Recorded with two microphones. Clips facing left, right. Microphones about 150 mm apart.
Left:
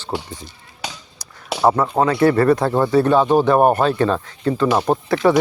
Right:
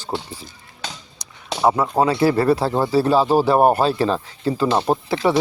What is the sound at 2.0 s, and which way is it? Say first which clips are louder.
Speech: left 2 dB; 25° right (ahead or behind).